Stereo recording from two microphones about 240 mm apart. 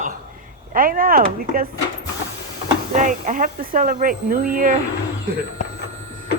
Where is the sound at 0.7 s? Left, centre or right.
Right.